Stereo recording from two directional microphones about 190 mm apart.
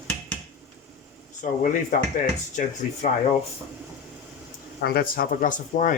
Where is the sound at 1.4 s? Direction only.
45° left (ahead or behind).